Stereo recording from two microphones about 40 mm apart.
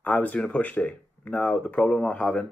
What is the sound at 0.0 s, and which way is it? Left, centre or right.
Speech, left.